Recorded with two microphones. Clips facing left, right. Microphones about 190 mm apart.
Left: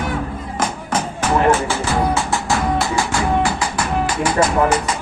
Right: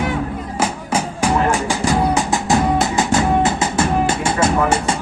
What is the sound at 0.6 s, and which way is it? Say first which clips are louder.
Music: right 1 dB; 10° right (ahead or behind).